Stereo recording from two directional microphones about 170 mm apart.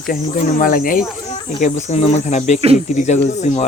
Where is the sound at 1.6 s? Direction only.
45° left (ahead or behind).